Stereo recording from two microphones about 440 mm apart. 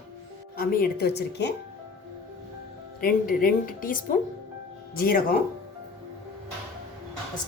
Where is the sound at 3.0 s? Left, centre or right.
Centre.